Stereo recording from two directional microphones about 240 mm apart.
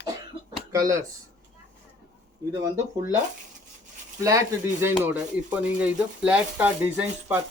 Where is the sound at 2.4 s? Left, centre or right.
Centre.